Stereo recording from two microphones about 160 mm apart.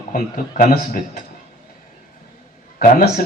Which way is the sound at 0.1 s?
65° left (ahead or behind).